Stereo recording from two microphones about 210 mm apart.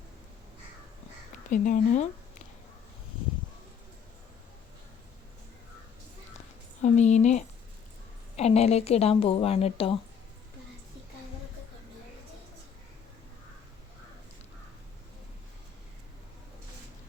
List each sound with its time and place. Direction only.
1.5 s speech: 40° left (ahead or behind)
6.8 s speech: 35° left (ahead or behind)